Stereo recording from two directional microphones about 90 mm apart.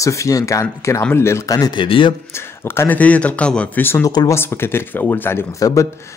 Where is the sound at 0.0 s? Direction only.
35° left (ahead or behind).